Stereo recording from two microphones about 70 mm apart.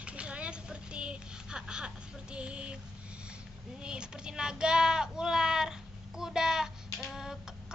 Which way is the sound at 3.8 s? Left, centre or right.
Centre.